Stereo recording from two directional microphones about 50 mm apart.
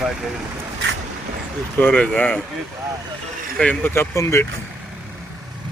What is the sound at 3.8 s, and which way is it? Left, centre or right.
Speech, left.